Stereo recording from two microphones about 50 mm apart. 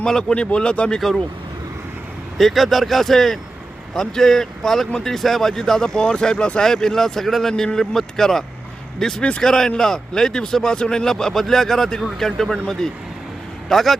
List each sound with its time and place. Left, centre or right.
0.0 s speech: centre
0.9 s speech: centre
2.4 s speech: centre